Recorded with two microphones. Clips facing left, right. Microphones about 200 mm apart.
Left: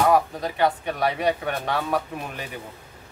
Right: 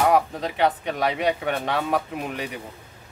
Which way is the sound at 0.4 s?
20° right (ahead or behind).